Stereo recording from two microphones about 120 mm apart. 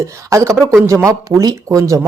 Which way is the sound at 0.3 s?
25° right (ahead or behind).